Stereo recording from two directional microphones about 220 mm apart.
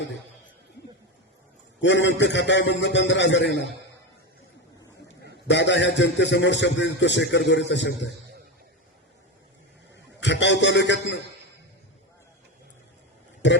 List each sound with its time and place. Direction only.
1.8 s a man's voice: 55° left (ahead or behind)
5.2 s a man's voice: 50° left (ahead or behind)
10.1 s a man's voice: 55° left (ahead or behind)
13.4 s a man's voice: 55° left (ahead or behind)